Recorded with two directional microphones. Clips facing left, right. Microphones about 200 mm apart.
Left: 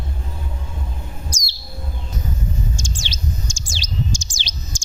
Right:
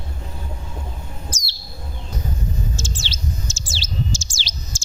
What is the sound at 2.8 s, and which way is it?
Bird, 15° left (ahead or behind).